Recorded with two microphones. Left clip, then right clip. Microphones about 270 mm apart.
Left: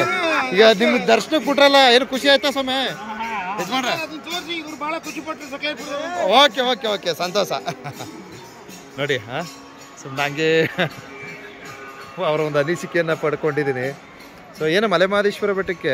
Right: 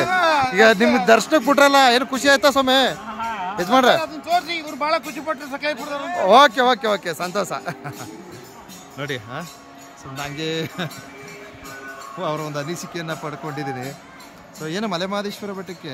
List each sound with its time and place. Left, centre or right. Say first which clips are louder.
0.0 s a sound: right 2 dB; right
0.5 s speech: left 5 dB; centre
4.5 s a sound: right 4 dB; right
6.2 s speech: right 2 dB; centre
8.9 s speech: left 6 dB; centre
12.2 s speech: left 7 dB; centre